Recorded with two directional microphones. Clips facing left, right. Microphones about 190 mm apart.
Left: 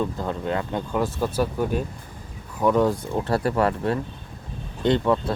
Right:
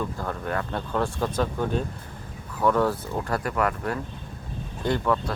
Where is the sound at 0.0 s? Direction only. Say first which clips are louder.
Left 4 dB; 20° left (ahead or behind).